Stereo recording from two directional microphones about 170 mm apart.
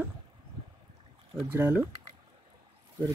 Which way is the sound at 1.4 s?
10° right (ahead or behind).